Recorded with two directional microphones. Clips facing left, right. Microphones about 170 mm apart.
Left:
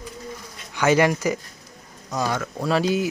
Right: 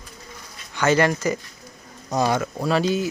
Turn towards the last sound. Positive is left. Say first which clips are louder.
# even
turn(degrees=10)  # may be behind; listen again after turning